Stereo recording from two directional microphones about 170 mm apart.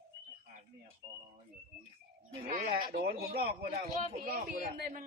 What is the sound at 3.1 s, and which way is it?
A man's voice, 70° right (ahead or behind).